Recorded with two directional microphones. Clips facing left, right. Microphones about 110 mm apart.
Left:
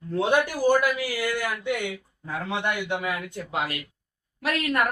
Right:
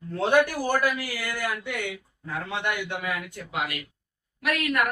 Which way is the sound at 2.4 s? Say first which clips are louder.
Left 3 dB; 20° left (ahead or behind).